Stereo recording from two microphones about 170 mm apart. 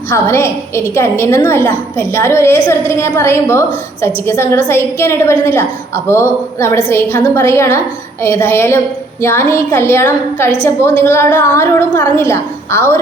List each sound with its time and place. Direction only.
0.1 s a woman's voice: 15° left (ahead or behind)